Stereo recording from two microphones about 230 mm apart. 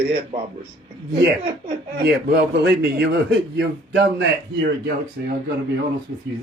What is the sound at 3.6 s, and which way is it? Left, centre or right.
Speech, right.